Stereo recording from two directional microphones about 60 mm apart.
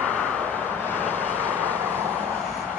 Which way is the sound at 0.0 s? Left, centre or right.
Left.